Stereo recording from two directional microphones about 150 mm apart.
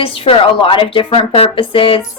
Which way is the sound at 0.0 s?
35° left (ahead or behind).